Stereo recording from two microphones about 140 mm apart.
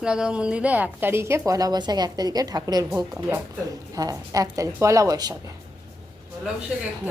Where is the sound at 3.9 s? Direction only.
25° right (ahead or behind).